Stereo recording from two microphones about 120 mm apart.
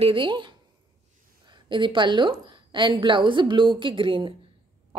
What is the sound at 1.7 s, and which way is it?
A woman's voice, 45° right (ahead or behind).